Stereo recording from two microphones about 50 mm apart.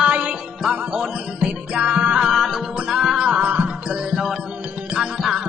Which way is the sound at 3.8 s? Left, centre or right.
Centre.